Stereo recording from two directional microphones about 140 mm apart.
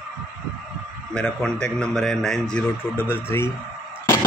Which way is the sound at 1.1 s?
5° left (ahead or behind).